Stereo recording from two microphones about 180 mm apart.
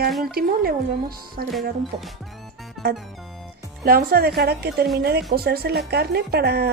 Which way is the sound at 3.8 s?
55° right (ahead or behind).